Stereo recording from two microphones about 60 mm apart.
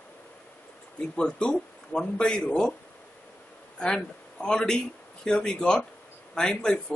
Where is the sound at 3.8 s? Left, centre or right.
Centre.